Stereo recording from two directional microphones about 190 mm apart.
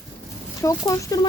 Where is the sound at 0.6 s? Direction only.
15° left (ahead or behind).